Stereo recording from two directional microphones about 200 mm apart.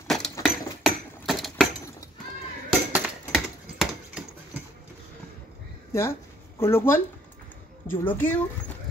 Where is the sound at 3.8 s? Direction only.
5° right (ahead or behind).